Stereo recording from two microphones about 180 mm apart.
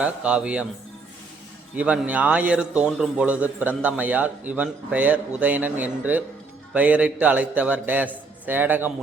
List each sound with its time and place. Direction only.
0.0 s a man's voice: 5° right (ahead or behind)
1.7 s a man's voice: 5° right (ahead or behind)